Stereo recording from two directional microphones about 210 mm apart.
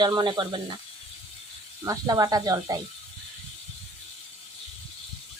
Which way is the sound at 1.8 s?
15° right (ahead or behind).